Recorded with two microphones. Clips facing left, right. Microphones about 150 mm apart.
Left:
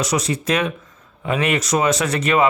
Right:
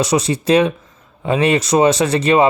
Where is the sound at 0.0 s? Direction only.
30° right (ahead or behind).